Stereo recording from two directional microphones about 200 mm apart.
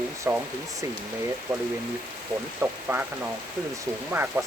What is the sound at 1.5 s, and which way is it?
Speech, 15° right (ahead or behind).